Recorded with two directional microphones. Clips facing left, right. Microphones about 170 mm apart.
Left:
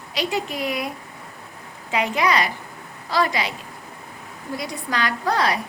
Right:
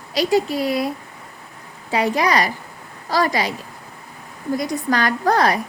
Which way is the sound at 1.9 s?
40° right (ahead or behind).